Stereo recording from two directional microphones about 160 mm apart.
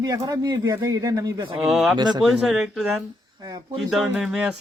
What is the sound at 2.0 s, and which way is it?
Speech, 25° right (ahead or behind).